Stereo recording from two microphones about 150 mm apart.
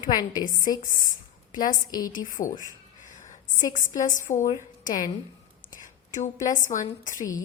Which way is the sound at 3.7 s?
60° left (ahead or behind).